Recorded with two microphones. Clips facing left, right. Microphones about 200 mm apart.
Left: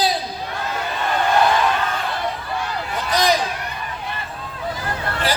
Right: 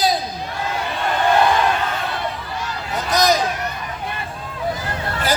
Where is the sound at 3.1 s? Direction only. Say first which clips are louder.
Right 1 dB; 45° right (ahead or behind).